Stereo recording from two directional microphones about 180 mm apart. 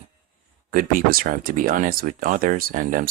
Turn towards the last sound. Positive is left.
turn(degrees=-50)  # may be behind; listen again after turning